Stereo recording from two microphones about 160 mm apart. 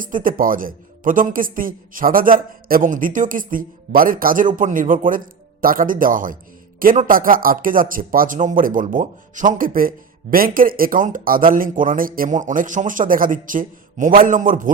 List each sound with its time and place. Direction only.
0.0 s speech: 60° right (ahead or behind)